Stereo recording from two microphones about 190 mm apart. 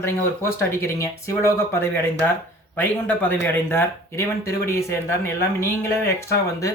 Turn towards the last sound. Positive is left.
turn(degrees=15)  # may be behind; listen again after turning